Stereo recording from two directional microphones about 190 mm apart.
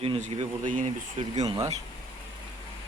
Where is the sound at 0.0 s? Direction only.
35° right (ahead or behind).